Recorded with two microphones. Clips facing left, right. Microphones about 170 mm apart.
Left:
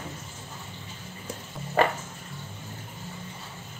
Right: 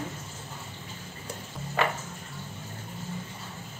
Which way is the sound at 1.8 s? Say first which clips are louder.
Left 5 dB; 40° left (ahead or behind).